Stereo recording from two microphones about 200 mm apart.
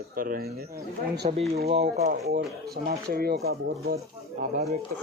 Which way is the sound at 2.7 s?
50° right (ahead or behind).